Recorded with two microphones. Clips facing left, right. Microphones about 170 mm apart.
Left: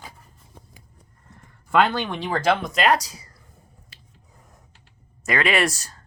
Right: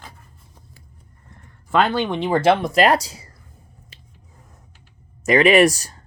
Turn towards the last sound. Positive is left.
turn(degrees=-20)  # may be behind; listen again after turning